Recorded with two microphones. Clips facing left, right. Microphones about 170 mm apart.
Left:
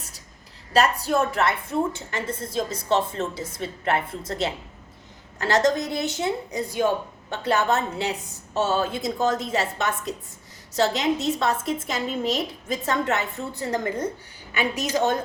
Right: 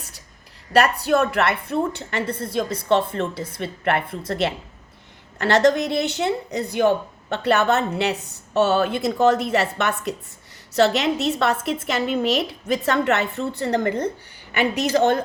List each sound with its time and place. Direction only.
0.7 s a woman's voice: 65° right (ahead or behind)